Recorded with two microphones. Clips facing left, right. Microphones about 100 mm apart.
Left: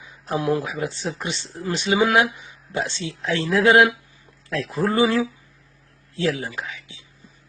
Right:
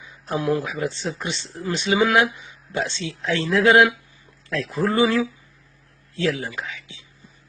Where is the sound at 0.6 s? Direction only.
Centre (ahead or behind).